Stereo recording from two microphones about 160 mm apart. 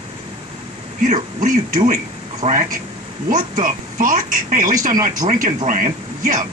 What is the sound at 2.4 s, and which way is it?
A man's voice, 45° right (ahead or behind).